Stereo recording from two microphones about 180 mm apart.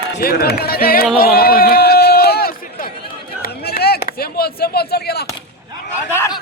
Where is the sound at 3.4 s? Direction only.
55° left (ahead or behind).